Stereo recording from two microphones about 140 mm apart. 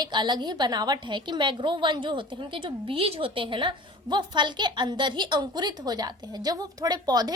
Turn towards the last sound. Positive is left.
turn(degrees=-30)  # may be behind; listen again after turning